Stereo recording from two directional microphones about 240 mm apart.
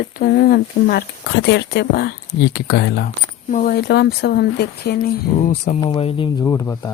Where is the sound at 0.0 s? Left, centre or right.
Left.